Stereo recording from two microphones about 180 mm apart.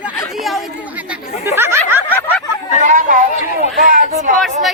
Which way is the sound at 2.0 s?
10° left (ahead or behind).